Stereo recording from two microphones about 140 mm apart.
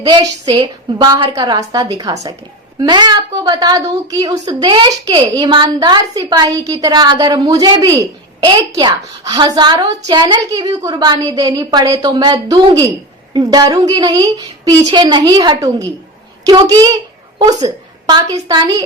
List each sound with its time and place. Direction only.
0.0 s a woman's voice: 30° right (ahead or behind)